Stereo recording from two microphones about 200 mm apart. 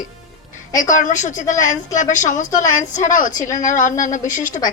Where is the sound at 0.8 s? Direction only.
40° left (ahead or behind).